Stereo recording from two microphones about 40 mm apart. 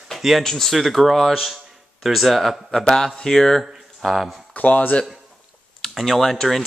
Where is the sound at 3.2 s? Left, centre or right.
Centre.